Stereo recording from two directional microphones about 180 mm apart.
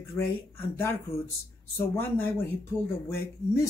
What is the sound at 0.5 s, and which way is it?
Speech, 15° left (ahead or behind).